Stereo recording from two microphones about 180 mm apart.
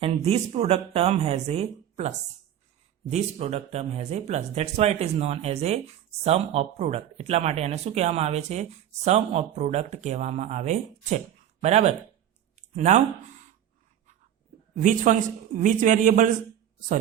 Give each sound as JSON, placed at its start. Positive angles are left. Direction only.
{"t": 0.0, "sound": "speech", "side_deg": -35}
{"t": 14.8, "sound": "speech", "side_deg": -45}